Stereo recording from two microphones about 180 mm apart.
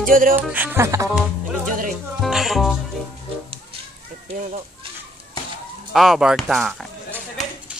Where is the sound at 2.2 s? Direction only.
Centre (ahead or behind).